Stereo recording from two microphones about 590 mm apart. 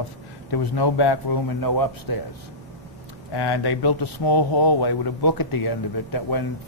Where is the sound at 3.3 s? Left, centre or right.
Left.